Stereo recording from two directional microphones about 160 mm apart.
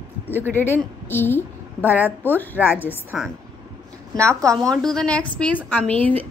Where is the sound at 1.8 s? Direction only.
10° right (ahead or behind).